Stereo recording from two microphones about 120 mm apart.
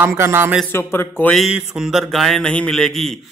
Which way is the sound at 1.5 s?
5° right (ahead or behind).